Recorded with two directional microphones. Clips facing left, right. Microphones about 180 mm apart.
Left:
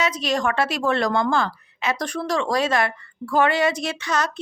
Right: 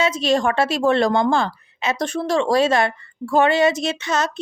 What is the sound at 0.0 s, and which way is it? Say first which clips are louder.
Speech: right 4 dB; 25° right (ahead or behind).